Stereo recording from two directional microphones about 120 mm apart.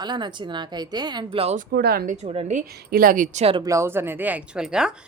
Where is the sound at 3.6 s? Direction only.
25° right (ahead or behind); by 5.0 s 5° right (ahead or behind).